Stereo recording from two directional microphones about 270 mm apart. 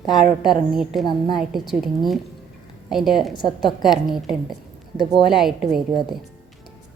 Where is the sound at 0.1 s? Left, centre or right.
Centre.